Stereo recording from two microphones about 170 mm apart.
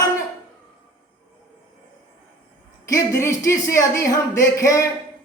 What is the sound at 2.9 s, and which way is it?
Speech, 15° left (ahead or behind).